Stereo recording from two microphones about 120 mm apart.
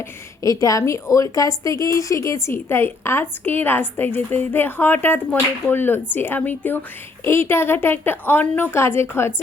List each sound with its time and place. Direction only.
0.6 s a woman's voice: 30° left (ahead or behind)